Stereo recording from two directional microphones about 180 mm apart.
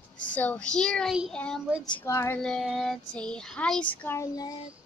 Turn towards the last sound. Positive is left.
turn(degrees=20)  # may be behind; listen again after turning